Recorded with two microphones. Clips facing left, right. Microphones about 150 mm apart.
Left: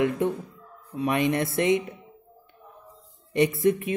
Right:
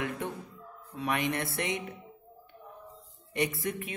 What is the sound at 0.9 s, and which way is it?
Speech, 20° left (ahead or behind).